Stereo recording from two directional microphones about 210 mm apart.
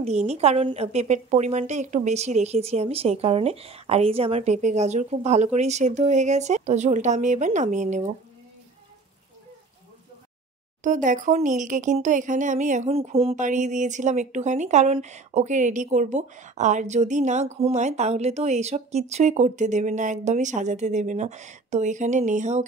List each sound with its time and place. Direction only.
0.0 s speech: 30° right (ahead or behind)
10.8 s speech: 40° right (ahead or behind)